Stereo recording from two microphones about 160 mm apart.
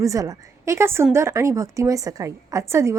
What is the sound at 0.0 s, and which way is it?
A woman's voice, 20° right (ahead or behind).